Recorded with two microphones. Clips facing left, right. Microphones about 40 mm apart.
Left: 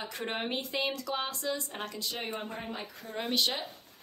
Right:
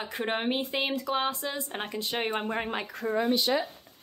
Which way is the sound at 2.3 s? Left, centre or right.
Right.